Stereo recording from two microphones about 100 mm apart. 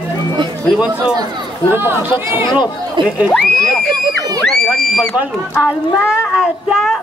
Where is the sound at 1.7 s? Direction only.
20° right (ahead or behind).